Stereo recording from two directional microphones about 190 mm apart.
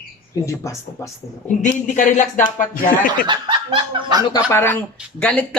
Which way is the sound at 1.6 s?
40° left (ahead or behind).